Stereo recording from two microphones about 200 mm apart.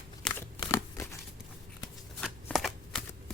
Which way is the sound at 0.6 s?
15° left (ahead or behind).